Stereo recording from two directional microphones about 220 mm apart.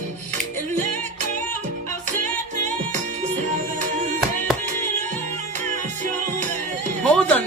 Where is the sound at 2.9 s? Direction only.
35° right (ahead or behind).